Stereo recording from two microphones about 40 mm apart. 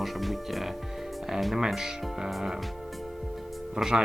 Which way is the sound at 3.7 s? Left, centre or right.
Centre.